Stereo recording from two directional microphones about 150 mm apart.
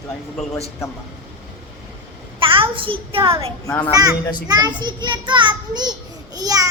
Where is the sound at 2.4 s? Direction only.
35° right (ahead or behind).